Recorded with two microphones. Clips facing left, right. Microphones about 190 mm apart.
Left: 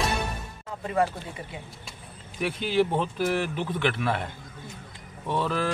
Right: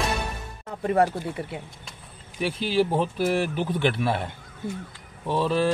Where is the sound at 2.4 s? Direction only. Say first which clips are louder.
Right 1 dB; 30° right (ahead or behind).